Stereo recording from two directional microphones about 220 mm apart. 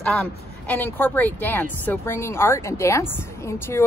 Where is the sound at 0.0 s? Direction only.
5° left (ahead or behind).